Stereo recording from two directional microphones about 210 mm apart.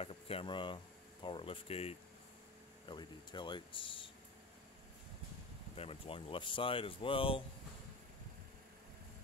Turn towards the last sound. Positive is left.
turn(degrees=25)  # may be behind; listen again after turning